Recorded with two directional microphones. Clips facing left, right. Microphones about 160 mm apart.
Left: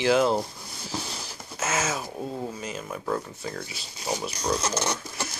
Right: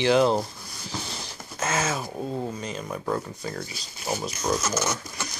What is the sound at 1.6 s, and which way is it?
Speech, 5° left (ahead or behind).